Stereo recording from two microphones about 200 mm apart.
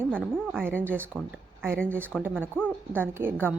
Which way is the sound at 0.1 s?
5° left (ahead or behind).